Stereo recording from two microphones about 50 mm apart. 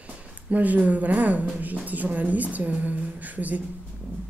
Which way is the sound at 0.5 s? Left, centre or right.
Right.